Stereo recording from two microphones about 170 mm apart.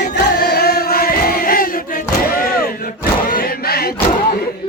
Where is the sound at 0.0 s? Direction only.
75° left (ahead or behind); by 2.0 s 55° left (ahead or behind).